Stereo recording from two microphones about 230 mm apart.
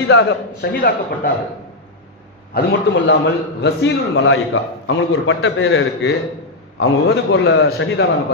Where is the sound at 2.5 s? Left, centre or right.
Left.